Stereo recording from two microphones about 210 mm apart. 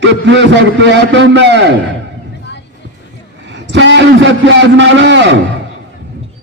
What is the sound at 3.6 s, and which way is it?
A man's voice, 60° right (ahead or behind).